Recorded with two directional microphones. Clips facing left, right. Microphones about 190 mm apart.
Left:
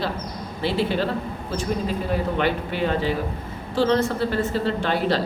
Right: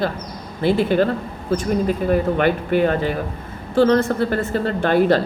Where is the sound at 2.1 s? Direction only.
50° right (ahead or behind).